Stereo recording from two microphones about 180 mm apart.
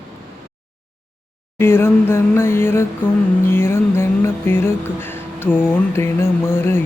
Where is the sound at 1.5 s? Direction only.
15° left (ahead or behind).